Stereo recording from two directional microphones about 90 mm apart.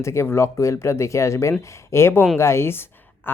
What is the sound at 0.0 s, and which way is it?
Speech, 30° left (ahead or behind).